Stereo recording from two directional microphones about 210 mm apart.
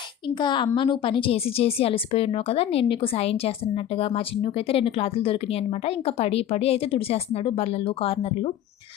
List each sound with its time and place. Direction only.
0.3 s speech: 20° left (ahead or behind)